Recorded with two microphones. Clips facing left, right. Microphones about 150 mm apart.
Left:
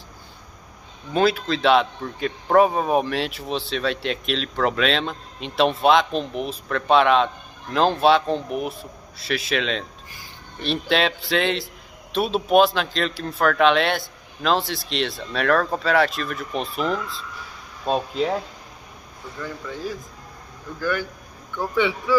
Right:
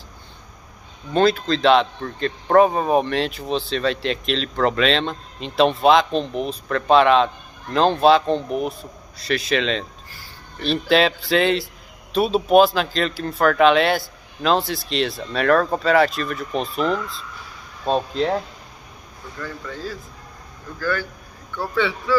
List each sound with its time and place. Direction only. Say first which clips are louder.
1.1 s a man's voice: right 2 dB; 5° left (ahead or behind)
19.4 s speech: left 1 dB; 15° left (ahead or behind)